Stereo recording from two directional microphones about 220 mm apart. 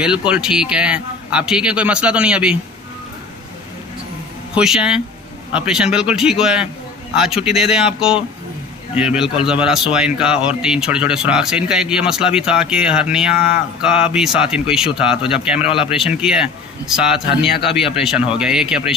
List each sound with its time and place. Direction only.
0.0 s a man's voice: 5° right (ahead or behind)
4.6 s a man's voice: 5° right (ahead or behind)